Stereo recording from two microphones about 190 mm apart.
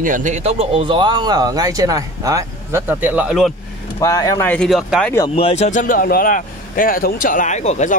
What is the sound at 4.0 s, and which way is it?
Speech, 15° left (ahead or behind).